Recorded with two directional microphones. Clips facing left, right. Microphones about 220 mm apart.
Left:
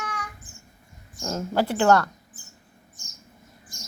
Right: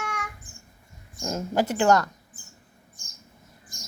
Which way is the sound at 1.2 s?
15° right (ahead or behind).